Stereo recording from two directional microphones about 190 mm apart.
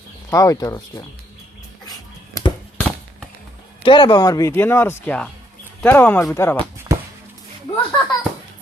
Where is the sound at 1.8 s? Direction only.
20° left (ahead or behind).